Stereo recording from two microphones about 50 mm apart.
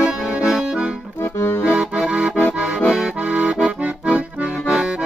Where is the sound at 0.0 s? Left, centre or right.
Centre.